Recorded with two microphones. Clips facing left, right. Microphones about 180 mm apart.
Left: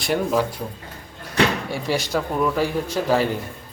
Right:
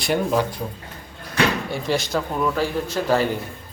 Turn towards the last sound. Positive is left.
turn(degrees=10)  # may be behind; listen again after turning